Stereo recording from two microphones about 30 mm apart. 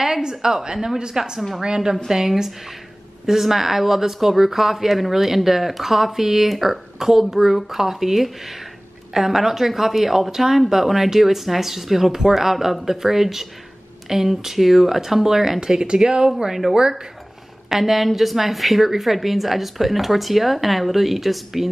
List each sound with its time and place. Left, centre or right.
0.2 s speech: right
15.6 s speech: right
17.6 s a woman's voice: centre